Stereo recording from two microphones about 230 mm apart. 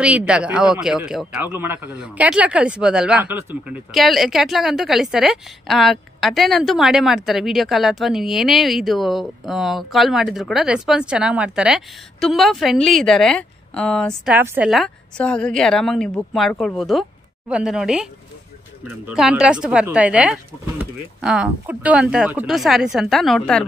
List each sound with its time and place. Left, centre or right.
0.0 s a man's voice: centre
14.3 s a man's voice: centre
19.0 s a man's voice: centre